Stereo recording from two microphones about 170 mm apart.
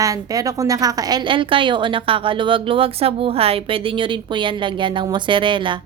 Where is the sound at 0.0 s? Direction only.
20° right (ahead or behind).